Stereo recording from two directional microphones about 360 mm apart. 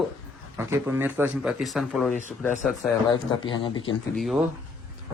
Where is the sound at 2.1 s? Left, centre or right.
Centre.